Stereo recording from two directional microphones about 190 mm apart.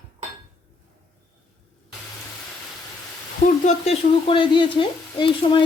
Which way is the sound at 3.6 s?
35° left (ahead or behind).